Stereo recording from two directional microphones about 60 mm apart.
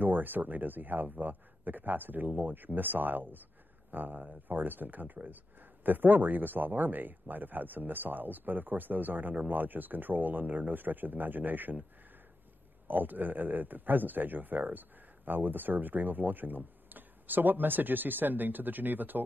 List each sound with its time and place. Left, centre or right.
0.0 s speech: right
12.8 s speech: right